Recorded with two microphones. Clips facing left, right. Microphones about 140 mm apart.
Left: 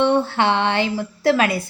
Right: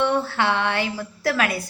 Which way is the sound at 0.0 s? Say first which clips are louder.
Left 4 dB; 20° left (ahead or behind).